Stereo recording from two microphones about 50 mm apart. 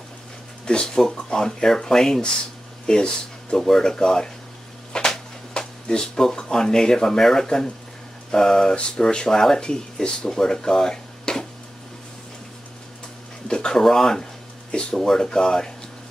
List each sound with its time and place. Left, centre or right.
0.7 s speech: centre
13.5 s speech: centre